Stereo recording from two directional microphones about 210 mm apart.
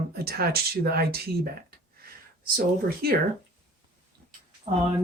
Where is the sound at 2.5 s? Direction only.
45° right (ahead or behind).